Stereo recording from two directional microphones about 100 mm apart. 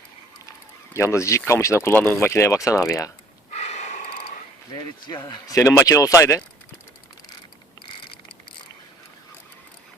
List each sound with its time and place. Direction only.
0.9 s speech: 30° left (ahead or behind)
5.0 s speech: 50° left (ahead or behind)
5.5 s speech: 30° left (ahead or behind)
7.9 s mechanisms: 60° left (ahead or behind)